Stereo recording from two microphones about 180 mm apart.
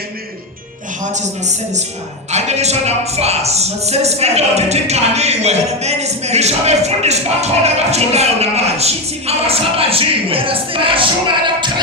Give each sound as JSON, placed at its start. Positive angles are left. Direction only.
{"t": 1.1, "sound": "speech", "side_deg": -40}